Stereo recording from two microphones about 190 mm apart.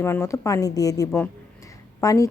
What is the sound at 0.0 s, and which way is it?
A woman's voice, 15° left (ahead or behind).